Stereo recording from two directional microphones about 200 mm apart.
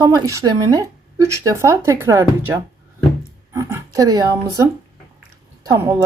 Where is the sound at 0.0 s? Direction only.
15° right (ahead or behind).